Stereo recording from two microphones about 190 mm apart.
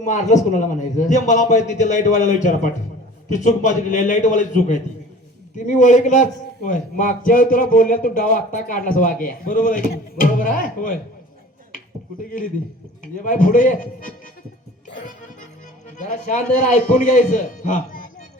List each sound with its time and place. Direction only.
0.0 s a man's voice: 40° left (ahead or behind)
13.1 s a man's voice: 45° left (ahead or behind)
16.0 s a man's voice: 40° left (ahead or behind)